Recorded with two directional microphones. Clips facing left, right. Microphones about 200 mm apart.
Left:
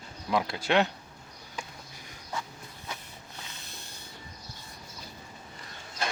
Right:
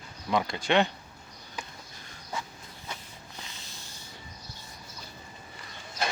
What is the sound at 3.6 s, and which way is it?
Snort, 60° left (ahead or behind).